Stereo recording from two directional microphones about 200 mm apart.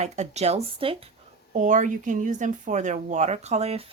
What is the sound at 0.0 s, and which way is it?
Speech, 35° right (ahead or behind).